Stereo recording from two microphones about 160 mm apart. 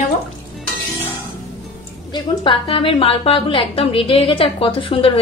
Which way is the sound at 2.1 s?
30° left (ahead or behind).